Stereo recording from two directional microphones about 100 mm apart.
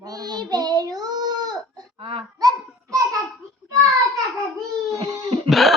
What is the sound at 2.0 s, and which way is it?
Speech, 60° right (ahead or behind).